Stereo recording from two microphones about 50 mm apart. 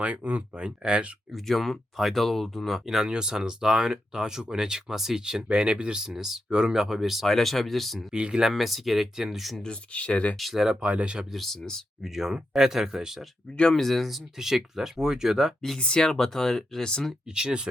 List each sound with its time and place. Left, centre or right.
0.0 s speech: right
1.3 s speech: centre
2.8 s speech: centre
8.1 s speech: centre
9.6 s speech: left
10.3 s speech: centre
10.6 s speech: centre
11.3 s speech: centre
12.0 s speech: centre
13.7 s speech: centre
15.8 s speech: centre
17.2 s speech: centre